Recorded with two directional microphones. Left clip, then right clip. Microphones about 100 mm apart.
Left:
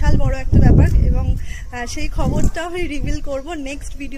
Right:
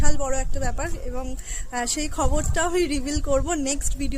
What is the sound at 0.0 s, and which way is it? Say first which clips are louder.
Speech: left 2 dB; 30° right (ahead or behind).